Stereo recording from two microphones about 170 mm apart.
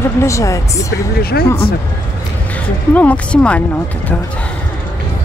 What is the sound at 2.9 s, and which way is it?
Speech, 10° left (ahead or behind).